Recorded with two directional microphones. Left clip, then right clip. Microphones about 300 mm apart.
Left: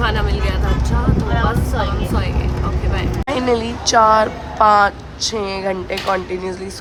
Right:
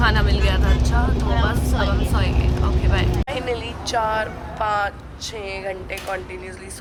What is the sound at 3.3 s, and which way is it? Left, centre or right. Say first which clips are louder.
Speech: left 12 dB; left.